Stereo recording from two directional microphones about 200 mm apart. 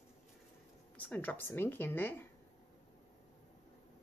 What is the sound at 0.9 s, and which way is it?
Speech, 10° left (ahead or behind).